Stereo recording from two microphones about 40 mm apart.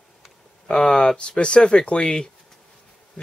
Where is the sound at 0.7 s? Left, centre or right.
Centre.